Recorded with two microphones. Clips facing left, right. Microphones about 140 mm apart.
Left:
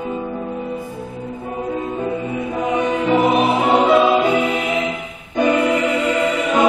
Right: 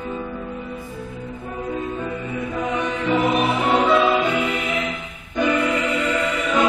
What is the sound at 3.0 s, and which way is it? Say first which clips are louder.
Music: left 3 dB; 20° left (ahead or behind).